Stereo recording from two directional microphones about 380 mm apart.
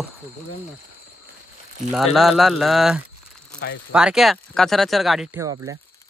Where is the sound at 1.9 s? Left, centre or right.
Centre.